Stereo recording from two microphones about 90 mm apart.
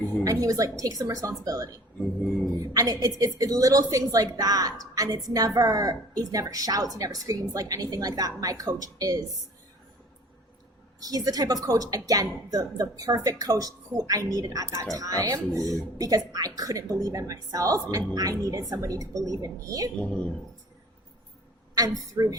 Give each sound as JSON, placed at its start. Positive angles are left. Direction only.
{"t": 0.3, "sound": "a woman's voice", "side_deg": -40}
{"t": 2.0, "sound": "a sound", "side_deg": 5}
{"t": 2.6, "sound": "a woman's voice", "side_deg": -40}
{"t": 11.0, "sound": "a woman's voice", "side_deg": -45}
{"t": 21.8, "sound": "a woman's voice", "side_deg": -45}